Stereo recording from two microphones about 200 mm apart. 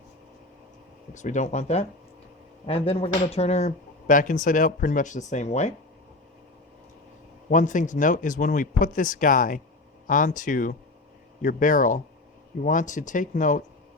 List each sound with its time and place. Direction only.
1.1 s speech: 35° left (ahead or behind)
7.5 s speech: 40° left (ahead or behind)